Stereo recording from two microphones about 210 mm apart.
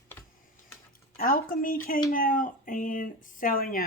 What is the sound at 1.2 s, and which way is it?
Speech, 45° left (ahead or behind).